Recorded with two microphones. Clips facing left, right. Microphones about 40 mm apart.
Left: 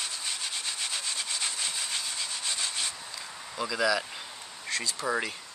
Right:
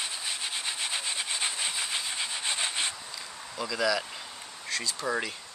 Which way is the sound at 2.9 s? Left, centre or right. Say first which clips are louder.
Even; centre.